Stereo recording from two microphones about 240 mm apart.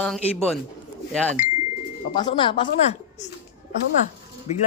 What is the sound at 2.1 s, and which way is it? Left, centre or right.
Speech, centre.